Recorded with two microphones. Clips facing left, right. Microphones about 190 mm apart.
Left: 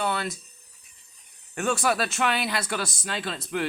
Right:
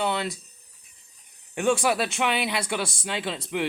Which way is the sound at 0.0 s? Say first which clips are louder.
Right 1 dB; 15° right (ahead or behind).